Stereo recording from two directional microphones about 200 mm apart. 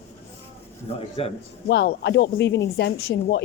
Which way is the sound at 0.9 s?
30° left (ahead or behind).